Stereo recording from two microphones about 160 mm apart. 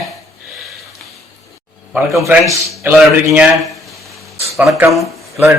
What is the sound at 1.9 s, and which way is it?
A man's voice, 10° right (ahead or behind).